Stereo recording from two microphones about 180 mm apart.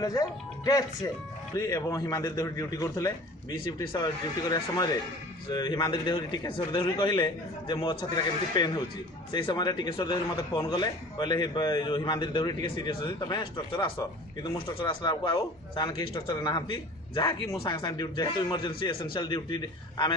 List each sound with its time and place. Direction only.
0.0 s a man's voice: 20° left (ahead or behind)